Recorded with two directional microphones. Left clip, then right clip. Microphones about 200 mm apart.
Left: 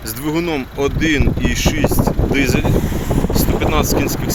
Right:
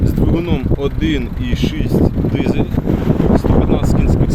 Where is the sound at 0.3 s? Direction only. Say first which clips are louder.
Right 1 dB; 5° left (ahead or behind).